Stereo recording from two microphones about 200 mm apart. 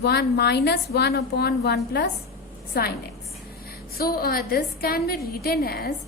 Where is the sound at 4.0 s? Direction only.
50° left (ahead or behind).